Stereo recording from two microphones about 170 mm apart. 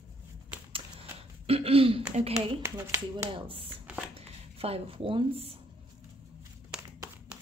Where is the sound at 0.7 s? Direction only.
35° right (ahead or behind).